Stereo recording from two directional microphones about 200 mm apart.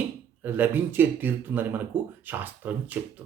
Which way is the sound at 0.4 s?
10° right (ahead or behind).